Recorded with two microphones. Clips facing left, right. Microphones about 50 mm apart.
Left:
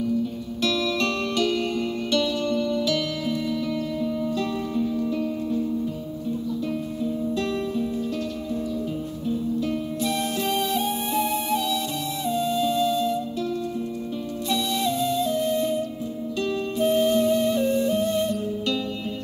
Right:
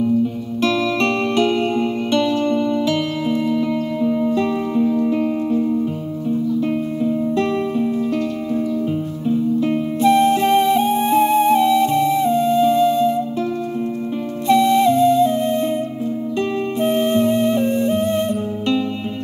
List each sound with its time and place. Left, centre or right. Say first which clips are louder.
0.0 s music: right 7 dB; right
7.0 s music: right 7 dB; right
9.6 s music: right 8 dB; right
14.5 s music: right 12 dB; right
16.8 s music: right 3 dB; right